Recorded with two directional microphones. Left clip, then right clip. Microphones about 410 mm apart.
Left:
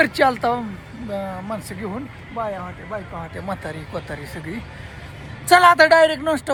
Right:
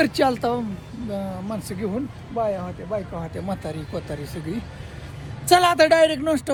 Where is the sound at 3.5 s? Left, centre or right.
Centre.